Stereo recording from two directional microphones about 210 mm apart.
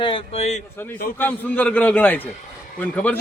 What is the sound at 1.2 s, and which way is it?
A man's voice, 10° left (ahead or behind).